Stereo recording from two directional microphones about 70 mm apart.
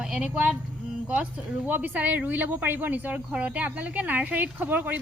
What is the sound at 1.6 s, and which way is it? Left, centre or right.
A woman's voice, right.